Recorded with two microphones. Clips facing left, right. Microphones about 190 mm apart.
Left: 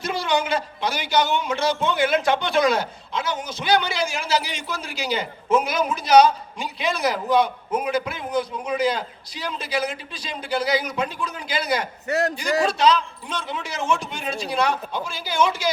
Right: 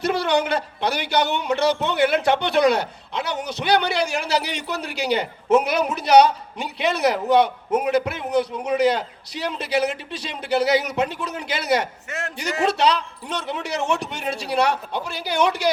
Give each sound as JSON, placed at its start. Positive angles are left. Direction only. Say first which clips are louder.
{"t": 0.0, "sound": "speech", "louder": "right 3 dB", "side_deg": -60}
{"t": 12.0, "sound": "a man's voice", "louder": "left 9 dB", "side_deg": 35}
{"t": 12.6, "sound": "speech", "louder": "right 2 dB", "side_deg": -65}